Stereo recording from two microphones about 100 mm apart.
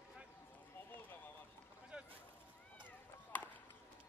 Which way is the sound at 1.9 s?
10° right (ahead or behind).